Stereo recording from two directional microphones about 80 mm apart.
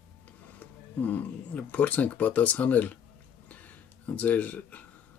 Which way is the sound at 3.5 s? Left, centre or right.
Centre.